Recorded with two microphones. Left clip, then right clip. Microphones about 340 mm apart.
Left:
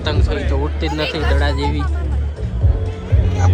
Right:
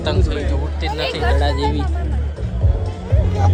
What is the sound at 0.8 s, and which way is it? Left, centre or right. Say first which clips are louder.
Speech: even; right.